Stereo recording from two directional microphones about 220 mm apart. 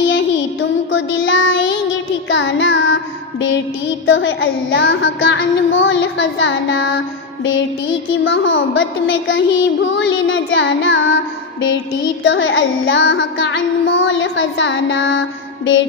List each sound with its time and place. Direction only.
0.1 s music: 60° left (ahead or behind)
2.3 s child singing: 60° left (ahead or behind)
8.1 s child singing: 60° left (ahead or behind)